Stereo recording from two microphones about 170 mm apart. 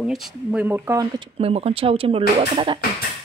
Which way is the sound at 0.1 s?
5° right (ahead or behind).